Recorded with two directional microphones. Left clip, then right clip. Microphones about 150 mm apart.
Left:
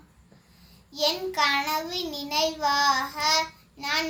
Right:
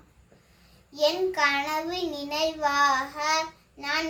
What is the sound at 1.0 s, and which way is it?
A child's voice, 15° right (ahead or behind).